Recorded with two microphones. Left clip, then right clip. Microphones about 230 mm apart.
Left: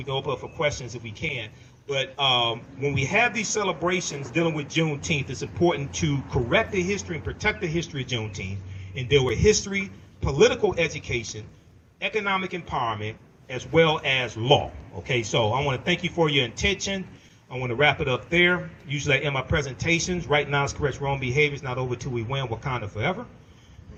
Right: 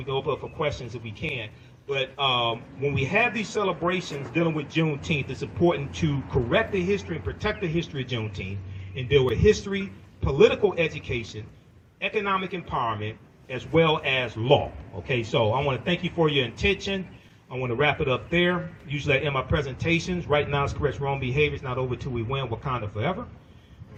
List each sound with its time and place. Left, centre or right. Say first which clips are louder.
0.1 s a man's voice: right 1 dB; left
17.5 s a man's voice: left 2 dB; left